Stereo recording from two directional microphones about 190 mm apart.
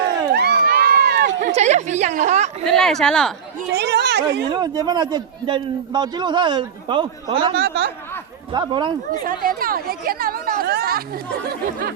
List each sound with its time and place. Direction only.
0.3 s run: 55° right (ahead or behind)
1.5 s a sound: 35° right (ahead or behind)
2.6 s speech: centre (ahead or behind)
3.7 s speech: 60° right (ahead or behind)
4.5 s a man's voice: 20° right (ahead or behind)
7.6 s speech: 55° right (ahead or behind)
8.5 s a man's voice: 25° right (ahead or behind)
9.2 s speech: 50° right (ahead or behind)